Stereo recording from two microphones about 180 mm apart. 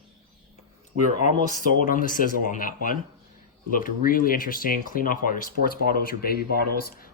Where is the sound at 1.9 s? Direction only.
50° left (ahead or behind).